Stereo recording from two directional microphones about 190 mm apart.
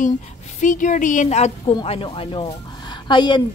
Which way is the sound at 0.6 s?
40° left (ahead or behind).